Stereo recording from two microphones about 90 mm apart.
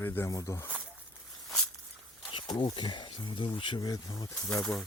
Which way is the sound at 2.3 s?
65° left (ahead or behind).